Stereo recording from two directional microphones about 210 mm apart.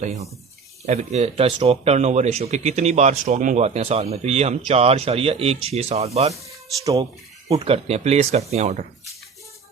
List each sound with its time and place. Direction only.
0.0 s speech: 35° right (ahead or behind)
6.8 s speech: 15° right (ahead or behind)
7.5 s speech: 30° right (ahead or behind)